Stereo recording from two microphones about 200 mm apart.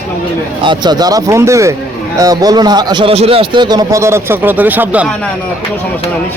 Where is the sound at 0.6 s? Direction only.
20° right (ahead or behind).